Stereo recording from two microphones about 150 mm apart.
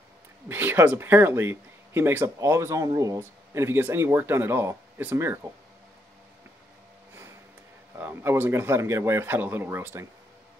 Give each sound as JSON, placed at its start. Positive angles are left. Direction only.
{"t": 0.5, "sound": "speech", "side_deg": -15}
{"t": 8.0, "sound": "speech", "side_deg": -15}